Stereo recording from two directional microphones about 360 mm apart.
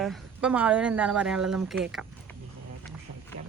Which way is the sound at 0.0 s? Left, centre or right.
Centre.